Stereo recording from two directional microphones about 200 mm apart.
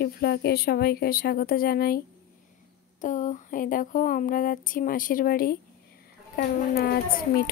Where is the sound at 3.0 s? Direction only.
40° left (ahead or behind).